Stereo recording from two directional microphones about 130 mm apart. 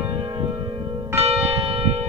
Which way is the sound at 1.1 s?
55° right (ahead or behind).